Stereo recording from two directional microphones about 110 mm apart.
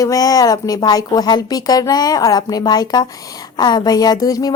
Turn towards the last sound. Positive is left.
turn(degrees=35)  # may be behind; listen again after turning